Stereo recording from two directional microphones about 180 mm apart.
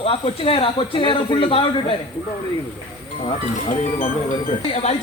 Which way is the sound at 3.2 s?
35° left (ahead or behind).